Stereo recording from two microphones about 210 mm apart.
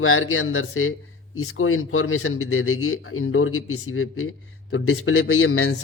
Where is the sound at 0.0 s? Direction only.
75° left (ahead or behind).